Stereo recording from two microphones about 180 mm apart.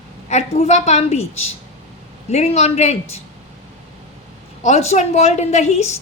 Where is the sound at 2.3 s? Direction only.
35° left (ahead or behind).